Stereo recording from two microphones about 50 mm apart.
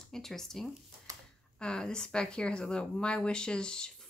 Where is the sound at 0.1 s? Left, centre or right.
Centre.